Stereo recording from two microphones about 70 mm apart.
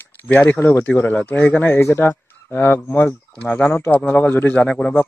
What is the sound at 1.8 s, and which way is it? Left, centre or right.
Speech, left.